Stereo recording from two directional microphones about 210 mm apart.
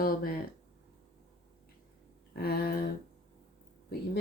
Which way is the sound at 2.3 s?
45° left (ahead or behind).